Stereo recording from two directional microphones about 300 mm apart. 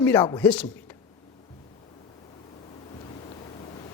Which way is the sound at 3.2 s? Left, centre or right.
Centre.